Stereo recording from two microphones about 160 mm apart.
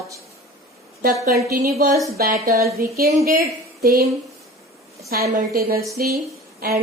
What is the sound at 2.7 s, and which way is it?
Speech, 70° right (ahead or behind).